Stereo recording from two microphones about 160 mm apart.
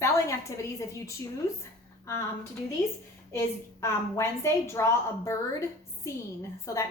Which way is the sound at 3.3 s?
15° left (ahead or behind).